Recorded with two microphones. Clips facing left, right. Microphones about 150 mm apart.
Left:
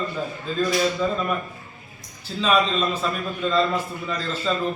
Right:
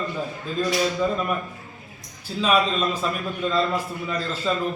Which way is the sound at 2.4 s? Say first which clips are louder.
Even; 10° right (ahead or behind).